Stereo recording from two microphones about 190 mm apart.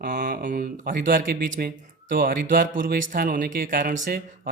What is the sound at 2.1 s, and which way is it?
Speech, 45° right (ahead or behind).